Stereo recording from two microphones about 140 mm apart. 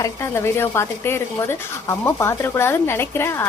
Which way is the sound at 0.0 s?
20° left (ahead or behind).